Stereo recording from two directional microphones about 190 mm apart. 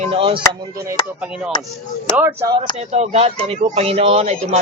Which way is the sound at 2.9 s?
35° right (ahead or behind).